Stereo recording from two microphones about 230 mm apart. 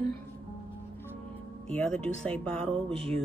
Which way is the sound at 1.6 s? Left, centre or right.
Centre.